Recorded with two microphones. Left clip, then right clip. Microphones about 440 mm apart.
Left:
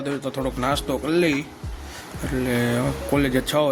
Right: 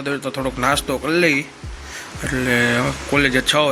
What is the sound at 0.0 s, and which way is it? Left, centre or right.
Speech, left.